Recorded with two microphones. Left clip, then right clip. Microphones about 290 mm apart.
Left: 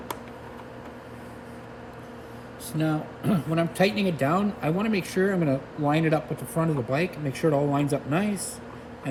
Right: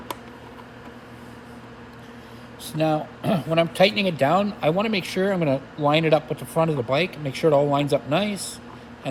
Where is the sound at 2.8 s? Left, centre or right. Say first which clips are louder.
Right 6 dB; centre.